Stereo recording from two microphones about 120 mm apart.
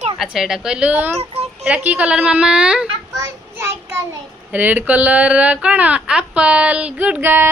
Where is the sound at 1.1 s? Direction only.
60° right (ahead or behind).